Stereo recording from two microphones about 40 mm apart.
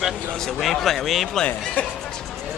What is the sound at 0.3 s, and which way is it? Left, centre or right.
Speech, centre.